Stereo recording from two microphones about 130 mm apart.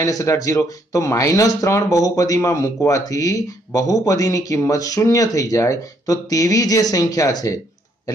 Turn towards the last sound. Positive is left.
turn(degrees=25)  # may be behind; listen again after turning